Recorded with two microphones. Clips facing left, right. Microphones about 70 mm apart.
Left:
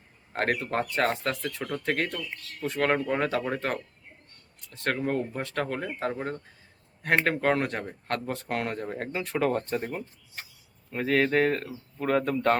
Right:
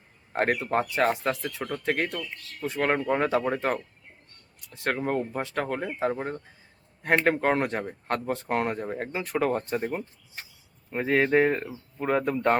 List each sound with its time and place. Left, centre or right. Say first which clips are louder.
0.3 s speech: right 3 dB; centre